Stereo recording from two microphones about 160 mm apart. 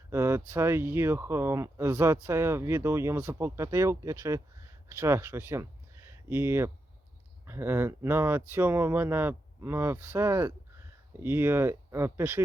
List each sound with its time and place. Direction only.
0.1 s speech: 15° right (ahead or behind)